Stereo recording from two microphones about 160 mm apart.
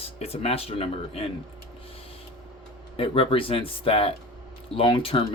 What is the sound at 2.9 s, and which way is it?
Speech, 35° left (ahead or behind).